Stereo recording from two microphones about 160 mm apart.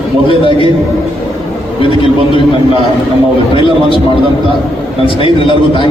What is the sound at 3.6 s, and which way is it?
Speech, 35° left (ahead or behind).